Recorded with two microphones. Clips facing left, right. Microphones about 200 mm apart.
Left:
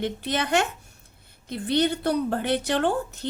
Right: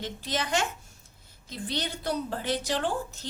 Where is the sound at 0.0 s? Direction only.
60° left (ahead or behind).